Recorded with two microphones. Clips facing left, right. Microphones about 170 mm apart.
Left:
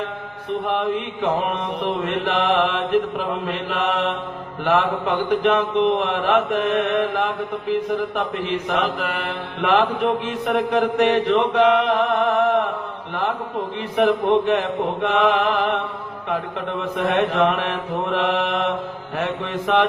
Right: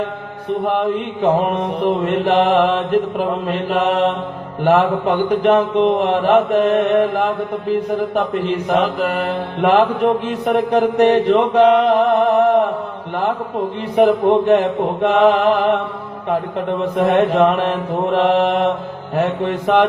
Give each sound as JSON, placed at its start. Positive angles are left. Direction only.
{"t": 1.2, "sound": "mantra", "side_deg": -40}
{"t": 3.7, "sound": "mantra", "side_deg": -40}
{"t": 8.7, "sound": "mantra", "side_deg": -40}
{"t": 13.9, "sound": "mantra", "side_deg": -35}
{"t": 17.1, "sound": "mantra", "side_deg": -35}